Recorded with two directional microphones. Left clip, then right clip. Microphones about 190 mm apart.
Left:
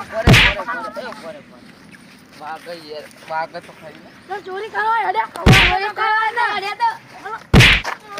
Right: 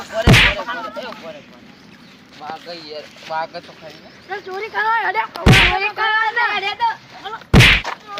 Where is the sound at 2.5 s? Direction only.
10° left (ahead or behind).